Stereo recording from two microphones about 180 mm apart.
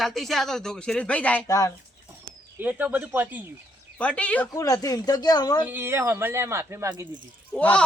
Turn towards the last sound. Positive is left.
turn(degrees=5)  # may be behind; listen again after turning